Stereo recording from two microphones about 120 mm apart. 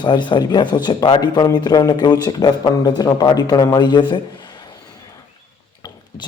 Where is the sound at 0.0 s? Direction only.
40° left (ahead or behind).